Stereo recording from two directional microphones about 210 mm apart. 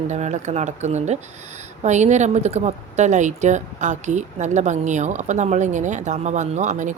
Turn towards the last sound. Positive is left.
turn(degrees=-35)  # may be behind; listen again after turning